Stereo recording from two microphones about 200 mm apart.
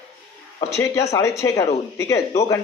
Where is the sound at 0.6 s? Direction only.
15° left (ahead or behind).